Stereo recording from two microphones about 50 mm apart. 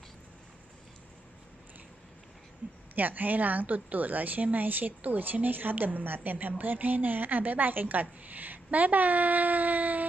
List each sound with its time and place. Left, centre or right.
2.9 s speech: right